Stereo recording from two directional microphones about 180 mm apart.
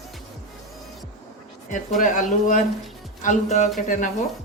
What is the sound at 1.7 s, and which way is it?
Speech, 45° left (ahead or behind).